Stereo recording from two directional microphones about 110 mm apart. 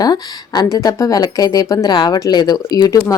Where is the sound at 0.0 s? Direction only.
40° left (ahead or behind).